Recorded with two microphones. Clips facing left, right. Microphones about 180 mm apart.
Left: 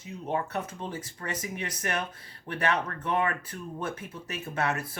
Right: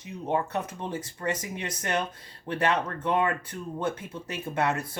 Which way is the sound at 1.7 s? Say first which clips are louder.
Right 5 dB; 25° right (ahead or behind).